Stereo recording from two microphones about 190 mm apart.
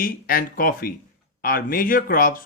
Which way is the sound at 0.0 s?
50° left (ahead or behind).